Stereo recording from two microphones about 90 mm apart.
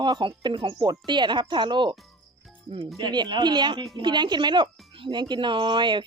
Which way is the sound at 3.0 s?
55° right (ahead or behind).